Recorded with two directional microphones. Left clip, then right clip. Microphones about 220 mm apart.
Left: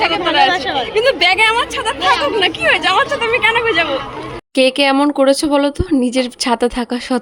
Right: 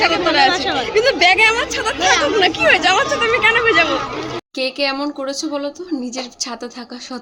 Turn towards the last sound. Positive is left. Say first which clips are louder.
# left 11 dB
turn(degrees=45)  # may be behind; listen again after turning